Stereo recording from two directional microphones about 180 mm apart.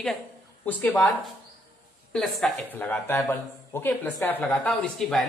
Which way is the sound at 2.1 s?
Centre (ahead or behind).